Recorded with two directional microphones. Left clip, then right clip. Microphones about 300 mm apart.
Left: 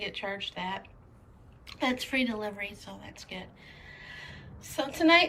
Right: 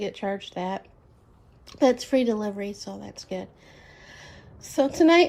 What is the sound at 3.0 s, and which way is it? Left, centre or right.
Speech, right.